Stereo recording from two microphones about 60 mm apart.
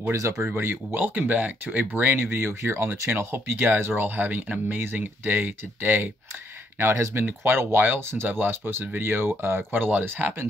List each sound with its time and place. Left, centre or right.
0.1 s speech: right
0.6 s speech: right
2.3 s speech: right